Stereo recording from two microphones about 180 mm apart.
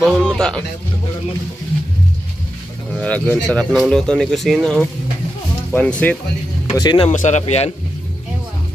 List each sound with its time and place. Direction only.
0.0 s music: 5° left (ahead or behind)
2.9 s speech: 5° left (ahead or behind)
6.7 s speech: 25° left (ahead or behind)
7.1 s speech: 40° left (ahead or behind)